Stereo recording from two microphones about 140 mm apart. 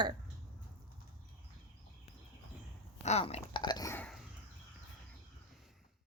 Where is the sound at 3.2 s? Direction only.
35° left (ahead or behind).